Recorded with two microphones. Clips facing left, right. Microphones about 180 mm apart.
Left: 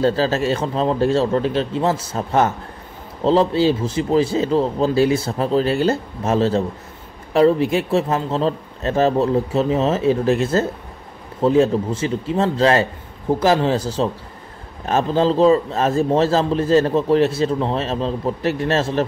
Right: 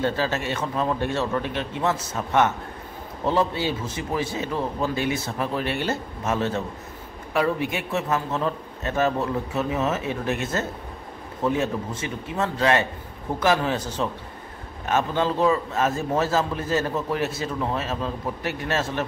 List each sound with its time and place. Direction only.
0.0 s a man's voice: 30° left (ahead or behind)